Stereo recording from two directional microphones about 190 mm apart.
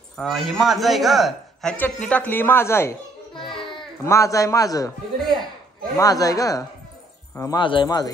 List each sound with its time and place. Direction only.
0.2 s a man's voice: centre (ahead or behind)
3.3 s a sound: 25° left (ahead or behind)
4.0 s a man's voice: 15° left (ahead or behind)
5.9 s a man's voice: 20° left (ahead or behind)